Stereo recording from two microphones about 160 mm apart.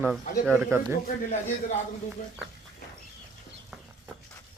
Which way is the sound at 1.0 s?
50° left (ahead or behind).